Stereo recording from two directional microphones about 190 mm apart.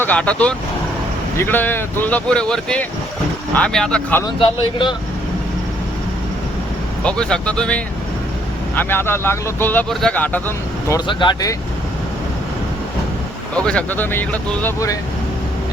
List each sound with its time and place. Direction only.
0.0 s speech: 5° left (ahead or behind)
4.4 s speech: 25° left (ahead or behind)
7.0 s speech: 5° left (ahead or behind)
10.8 s speech: 20° left (ahead or behind)
13.7 s speech: 10° left (ahead or behind)